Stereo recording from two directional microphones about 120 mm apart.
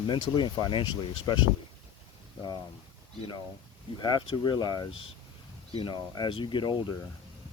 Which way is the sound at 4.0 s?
40° left (ahead or behind).